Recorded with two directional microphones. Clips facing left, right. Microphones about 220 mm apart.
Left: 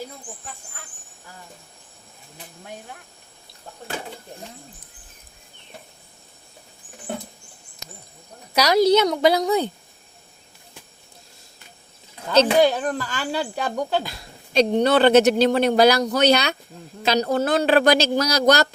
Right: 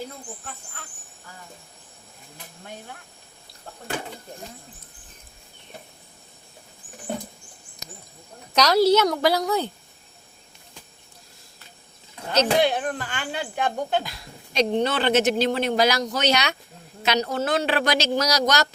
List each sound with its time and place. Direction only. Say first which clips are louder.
8.5 s a woman's voice: left 1 dB; 15° left (ahead or behind)
12.3 s a woman's voice: left 4 dB; 35° left (ahead or behind)